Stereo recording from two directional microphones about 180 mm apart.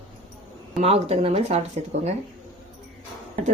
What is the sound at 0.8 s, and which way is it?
A woman's voice, 35° right (ahead or behind).